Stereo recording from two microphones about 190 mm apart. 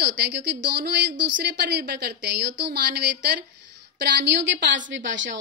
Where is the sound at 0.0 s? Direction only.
60° right (ahead or behind).